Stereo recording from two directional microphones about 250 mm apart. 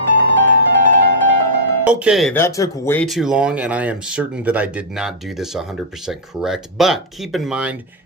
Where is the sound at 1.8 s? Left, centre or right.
Centre.